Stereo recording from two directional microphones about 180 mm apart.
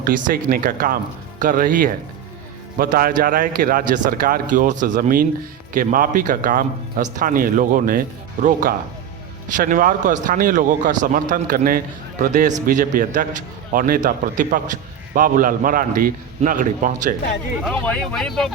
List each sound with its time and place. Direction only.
0.0 s a man's voice: 50° right (ahead or behind)
17.7 s speech: 5° left (ahead or behind)